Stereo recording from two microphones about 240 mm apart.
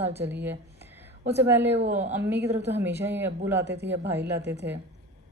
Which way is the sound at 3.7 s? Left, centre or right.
Right.